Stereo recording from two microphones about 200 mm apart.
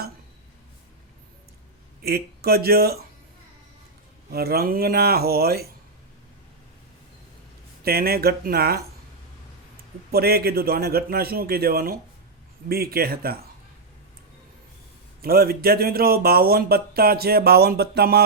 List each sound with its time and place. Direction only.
2.0 s speech: 50° right (ahead or behind)
4.3 s speech: 50° right (ahead or behind)
7.9 s speech: 50° right (ahead or behind)
10.1 s speech: 50° right (ahead or behind)
15.2 s speech: 50° right (ahead or behind)